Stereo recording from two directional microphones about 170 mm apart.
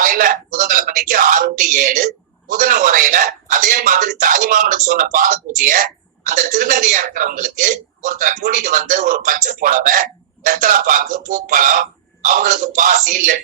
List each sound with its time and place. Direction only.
0.0 s a man's voice: 55° right (ahead or behind)